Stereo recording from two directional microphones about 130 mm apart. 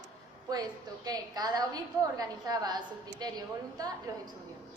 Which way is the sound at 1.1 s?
30° right (ahead or behind).